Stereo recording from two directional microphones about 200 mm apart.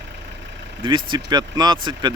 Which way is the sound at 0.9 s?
25° right (ahead or behind).